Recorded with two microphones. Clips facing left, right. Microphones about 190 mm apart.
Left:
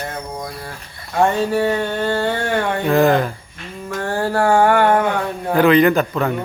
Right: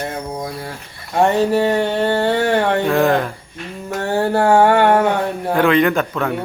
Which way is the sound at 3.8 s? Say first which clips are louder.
Right 3 dB; 25° right (ahead or behind).